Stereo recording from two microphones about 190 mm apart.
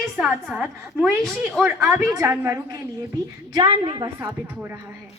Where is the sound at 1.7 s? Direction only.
15° right (ahead or behind).